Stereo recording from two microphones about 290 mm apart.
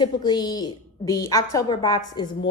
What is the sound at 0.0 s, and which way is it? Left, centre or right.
A woman's voice, centre.